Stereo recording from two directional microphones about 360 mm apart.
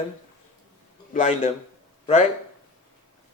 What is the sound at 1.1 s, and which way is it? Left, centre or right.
Speech, centre.